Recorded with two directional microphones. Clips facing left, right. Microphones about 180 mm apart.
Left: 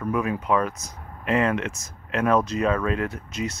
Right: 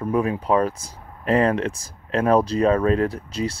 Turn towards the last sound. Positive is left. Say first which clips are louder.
# right 4 dB
turn(degrees=-30)  # may be behind; listen again after turning